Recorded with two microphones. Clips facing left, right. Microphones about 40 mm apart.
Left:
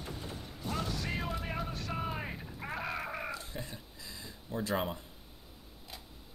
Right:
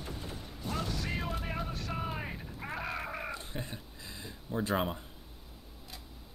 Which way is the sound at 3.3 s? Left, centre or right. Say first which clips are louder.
Right 1 dB; right.